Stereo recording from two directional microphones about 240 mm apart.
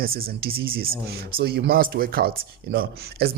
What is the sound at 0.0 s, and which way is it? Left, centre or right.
Speech, right.